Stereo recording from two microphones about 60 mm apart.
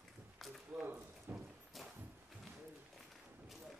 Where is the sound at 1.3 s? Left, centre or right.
Right.